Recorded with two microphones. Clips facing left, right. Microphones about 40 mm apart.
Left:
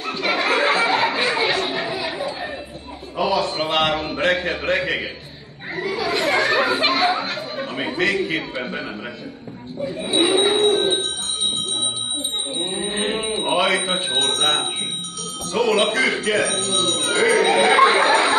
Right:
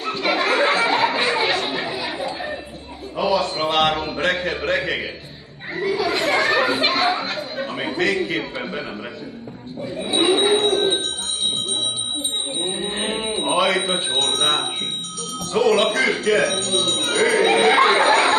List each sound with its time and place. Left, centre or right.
0.0 s a sound: centre
3.2 s a man's voice: centre
7.2 s chatter: centre
7.9 s a man's voice: centre
9.8 s speech: centre
12.5 s livestock: centre
14.0 s a man's voice: centre